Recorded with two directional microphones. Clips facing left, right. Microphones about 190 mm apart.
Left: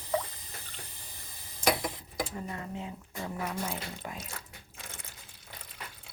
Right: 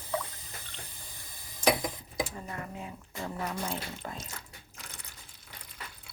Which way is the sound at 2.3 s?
20° left (ahead or behind).